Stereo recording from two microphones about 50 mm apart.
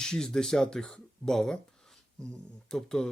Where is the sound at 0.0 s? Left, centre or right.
Centre.